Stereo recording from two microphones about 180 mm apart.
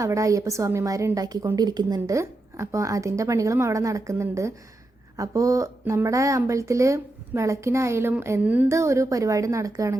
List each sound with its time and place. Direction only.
0.0 s speech: 15° right (ahead or behind)